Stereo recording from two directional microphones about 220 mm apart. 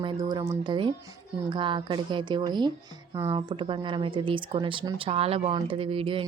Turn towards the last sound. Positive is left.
turn(degrees=-25)  # may be behind; listen again after turning